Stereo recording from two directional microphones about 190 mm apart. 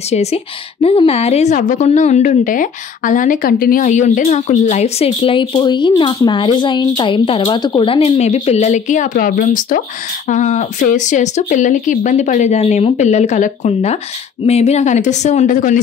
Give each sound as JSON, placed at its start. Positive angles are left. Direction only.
{"t": 0.1, "sound": "a woman's voice", "side_deg": 35}